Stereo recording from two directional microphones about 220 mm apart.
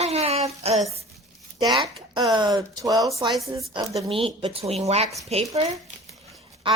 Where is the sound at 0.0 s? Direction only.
30° right (ahead or behind).